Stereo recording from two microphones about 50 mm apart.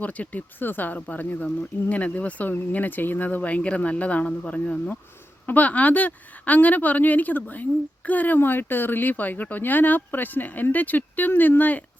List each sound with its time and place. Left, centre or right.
0.0 s speech: left
8.4 s speech: left